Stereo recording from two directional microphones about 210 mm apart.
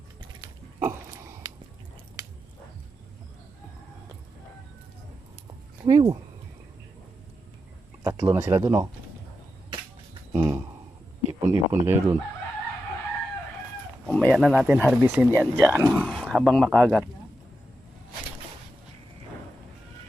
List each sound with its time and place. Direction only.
0.8 s pig: 10° right (ahead or behind)
5.8 s speech: 20° right (ahead or behind)
8.0 s speech: 15° right (ahead or behind)
10.3 s a sound: 10° right (ahead or behind)
11.3 s speech: 10° right (ahead or behind)
14.1 s speech: 5° left (ahead or behind); by 16.0 s 10° right (ahead or behind)
16.0 s speech: centre (ahead or behind)